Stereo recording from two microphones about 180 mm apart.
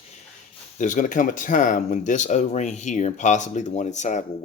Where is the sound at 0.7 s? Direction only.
45° left (ahead or behind).